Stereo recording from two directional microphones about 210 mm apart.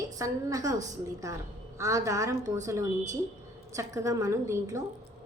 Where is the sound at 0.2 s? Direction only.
15° right (ahead or behind).